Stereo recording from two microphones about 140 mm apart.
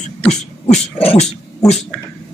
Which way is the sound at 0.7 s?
45° left (ahead or behind).